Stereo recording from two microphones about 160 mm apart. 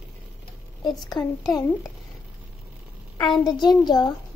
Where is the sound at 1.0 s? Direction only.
25° left (ahead or behind).